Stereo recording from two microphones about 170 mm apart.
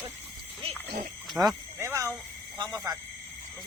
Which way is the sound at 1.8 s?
15° right (ahead or behind).